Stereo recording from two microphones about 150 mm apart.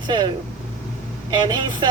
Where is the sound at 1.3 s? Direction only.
30° right (ahead or behind).